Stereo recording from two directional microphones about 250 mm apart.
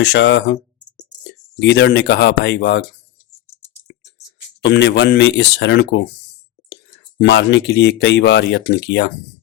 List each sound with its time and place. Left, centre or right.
0.0 s speech: left
4.6 s speech: left
7.2 s speech: left